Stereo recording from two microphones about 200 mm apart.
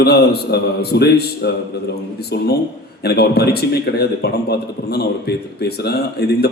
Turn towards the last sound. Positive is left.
turn(degrees=55)  # may be behind; listen again after turning